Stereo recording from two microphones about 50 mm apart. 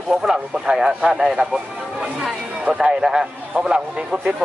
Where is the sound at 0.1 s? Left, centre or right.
Centre.